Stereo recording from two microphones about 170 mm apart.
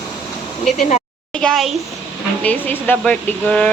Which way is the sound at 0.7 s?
45° left (ahead or behind).